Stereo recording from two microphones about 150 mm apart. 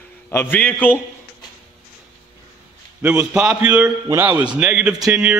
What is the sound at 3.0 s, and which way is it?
A man's voice, 10° right (ahead or behind).